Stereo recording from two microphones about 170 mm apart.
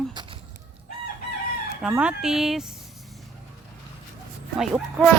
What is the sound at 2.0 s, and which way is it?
Speech, 5° right (ahead or behind).